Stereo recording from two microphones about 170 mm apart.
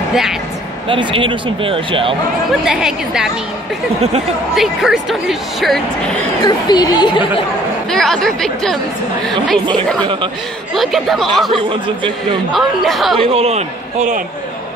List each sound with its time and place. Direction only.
0.1 s speech: centre (ahead or behind)
0.8 s speech: 30° right (ahead or behind)
2.6 s a woman's voice: 5° right (ahead or behind)
4.6 s a woman's voice: centre (ahead or behind)
6.4 s speech: 25° left (ahead or behind)
7.9 s a woman's voice: centre (ahead or behind)
10.7 s a woman's voice: centre (ahead or behind)
12.5 s a woman's voice: centre (ahead or behind)
13.2 s speech: 35° right (ahead or behind)